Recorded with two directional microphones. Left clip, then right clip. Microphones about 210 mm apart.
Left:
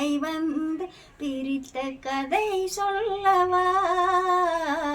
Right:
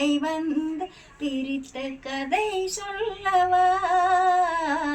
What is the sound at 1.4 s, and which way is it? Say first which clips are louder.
Female singing: left 1 dB; 20° left (ahead or behind).